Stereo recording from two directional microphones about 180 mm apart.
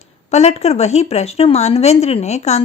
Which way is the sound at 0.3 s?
40° left (ahead or behind).